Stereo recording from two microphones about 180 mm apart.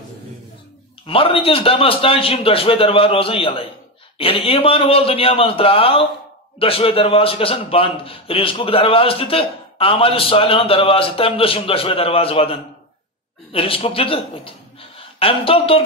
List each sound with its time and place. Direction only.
1.0 s a man's voice: 30° left (ahead or behind)